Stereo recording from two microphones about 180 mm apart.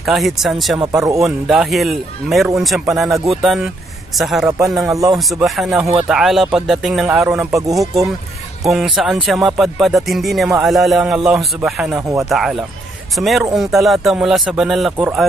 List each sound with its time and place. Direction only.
0.0 s speech: centre (ahead or behind)
0.7 s speech: 20° right (ahead or behind)
1.2 s speech: centre (ahead or behind)
4.8 s speech: 20° right (ahead or behind)
5.3 s speech: centre (ahead or behind)
7.5 s speech: 20° right (ahead or behind)
8.6 s speech: centre (ahead or behind)